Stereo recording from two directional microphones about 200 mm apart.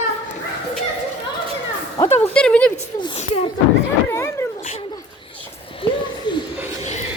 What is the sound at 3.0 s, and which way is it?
Speech, 30° left (ahead or behind).